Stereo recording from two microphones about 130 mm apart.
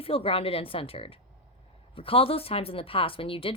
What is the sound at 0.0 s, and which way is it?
Speech, 45° left (ahead or behind).